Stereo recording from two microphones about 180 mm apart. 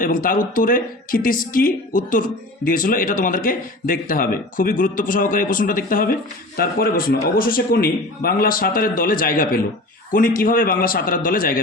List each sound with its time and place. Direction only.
0.0 s a man's voice: 50° left (ahead or behind)